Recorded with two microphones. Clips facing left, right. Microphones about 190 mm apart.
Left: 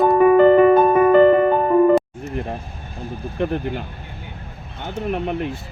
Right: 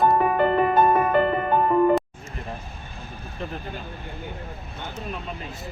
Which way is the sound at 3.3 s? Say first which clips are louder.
Left 11 dB; 65° left (ahead or behind).